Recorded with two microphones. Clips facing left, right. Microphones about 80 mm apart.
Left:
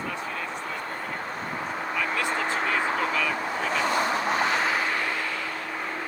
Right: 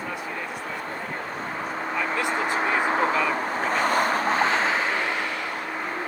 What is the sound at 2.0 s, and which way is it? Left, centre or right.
Vehicle, right.